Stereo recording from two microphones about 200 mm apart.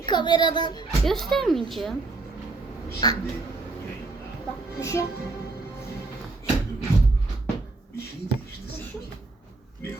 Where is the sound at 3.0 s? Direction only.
20° left (ahead or behind).